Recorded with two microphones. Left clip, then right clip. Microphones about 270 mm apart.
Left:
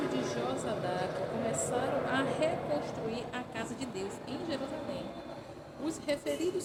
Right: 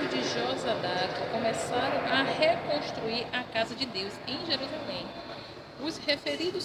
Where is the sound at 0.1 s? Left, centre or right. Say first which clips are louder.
Right 4 dB; centre.